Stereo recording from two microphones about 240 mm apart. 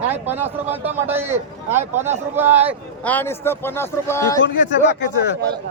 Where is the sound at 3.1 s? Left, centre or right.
Centre.